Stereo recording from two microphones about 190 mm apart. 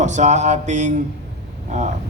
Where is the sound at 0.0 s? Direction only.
40° right (ahead or behind).